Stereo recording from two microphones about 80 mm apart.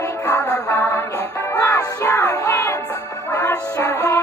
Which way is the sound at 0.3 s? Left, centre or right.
Left.